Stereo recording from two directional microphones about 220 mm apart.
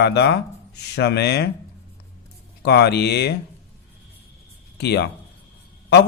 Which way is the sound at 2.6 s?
50° left (ahead or behind).